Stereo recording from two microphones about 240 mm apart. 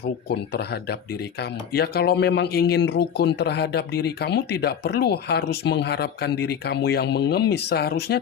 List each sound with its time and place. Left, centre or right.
0.0 s speech: left